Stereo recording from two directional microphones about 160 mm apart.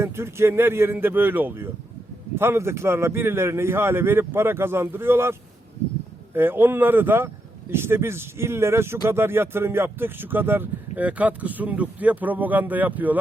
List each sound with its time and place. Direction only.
0.0 s speech: 15° right (ahead or behind)